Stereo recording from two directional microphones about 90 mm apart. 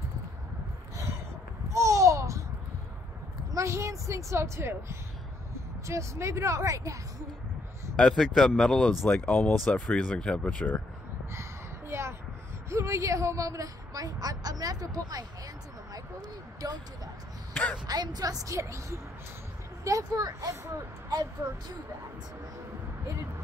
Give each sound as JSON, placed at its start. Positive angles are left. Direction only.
{"t": 1.7, "sound": "babbling", "side_deg": -35}
{"t": 3.5, "sound": "speech", "side_deg": -35}
{"t": 8.2, "sound": "speech", "side_deg": 5}
{"t": 11.9, "sound": "a sound", "side_deg": -30}
{"t": 12.6, "sound": "a woman's voice", "side_deg": -35}
{"t": 15.9, "sound": "a sound", "side_deg": -45}
{"t": 17.8, "sound": "a woman's voice", "side_deg": -50}